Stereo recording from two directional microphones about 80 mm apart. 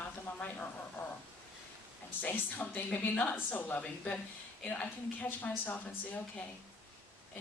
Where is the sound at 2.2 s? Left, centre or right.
Left.